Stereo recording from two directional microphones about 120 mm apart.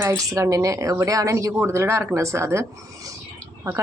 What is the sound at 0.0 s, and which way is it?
Speech, 25° right (ahead or behind).